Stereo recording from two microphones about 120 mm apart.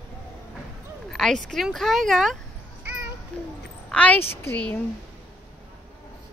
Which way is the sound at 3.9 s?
10° left (ahead or behind).